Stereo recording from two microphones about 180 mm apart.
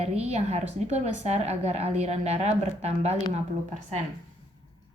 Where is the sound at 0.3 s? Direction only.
35° right (ahead or behind).